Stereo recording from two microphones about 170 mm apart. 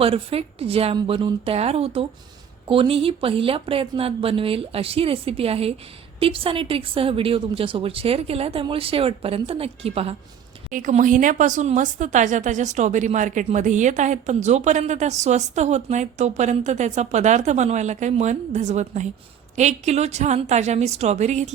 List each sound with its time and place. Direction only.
0.0 s speech: 35° right (ahead or behind)
10.7 s speech: 50° right (ahead or behind)